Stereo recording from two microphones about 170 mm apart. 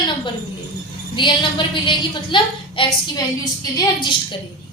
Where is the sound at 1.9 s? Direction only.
30° left (ahead or behind).